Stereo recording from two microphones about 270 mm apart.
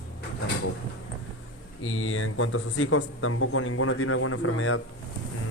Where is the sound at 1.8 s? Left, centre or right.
Left.